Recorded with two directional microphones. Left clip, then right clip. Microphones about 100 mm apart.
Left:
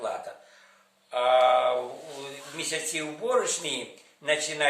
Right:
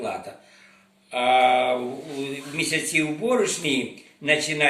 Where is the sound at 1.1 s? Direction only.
30° left (ahead or behind).